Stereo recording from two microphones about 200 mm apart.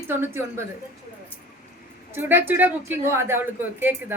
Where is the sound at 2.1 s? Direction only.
10° right (ahead or behind).